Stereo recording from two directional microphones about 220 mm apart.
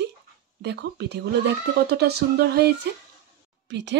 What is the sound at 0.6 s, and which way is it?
A woman's voice, 50° right (ahead or behind).